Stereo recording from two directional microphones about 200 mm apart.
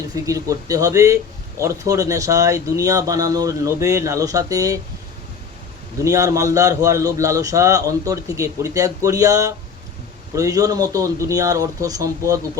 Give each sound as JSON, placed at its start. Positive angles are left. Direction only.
{"t": 0.3, "sound": "a man's voice", "side_deg": -15}
{"t": 6.1, "sound": "a man's voice", "side_deg": -15}